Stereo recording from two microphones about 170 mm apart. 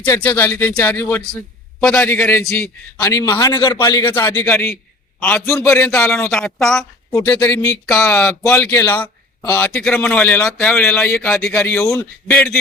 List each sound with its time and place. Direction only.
0.0 s a man's voice: 15° left (ahead or behind)
2.6 s a man's voice: 15° left (ahead or behind)
3.5 s a man's voice: 25° left (ahead or behind); by 6.8 s 5° left (ahead or behind)
7.1 s a man's voice: 20° left (ahead or behind)